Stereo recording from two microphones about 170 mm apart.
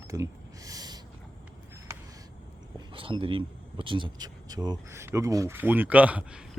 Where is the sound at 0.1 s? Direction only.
20° right (ahead or behind).